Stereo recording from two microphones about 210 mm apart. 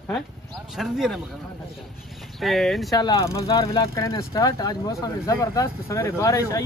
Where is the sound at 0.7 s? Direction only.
Centre (ahead or behind).